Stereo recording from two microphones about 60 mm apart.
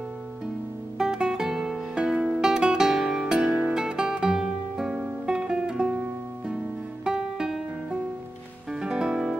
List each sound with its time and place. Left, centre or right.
0.9 s music: centre
7.1 s music: centre